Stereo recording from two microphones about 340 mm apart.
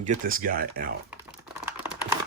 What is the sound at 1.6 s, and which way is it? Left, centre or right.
Computer keyboard, centre.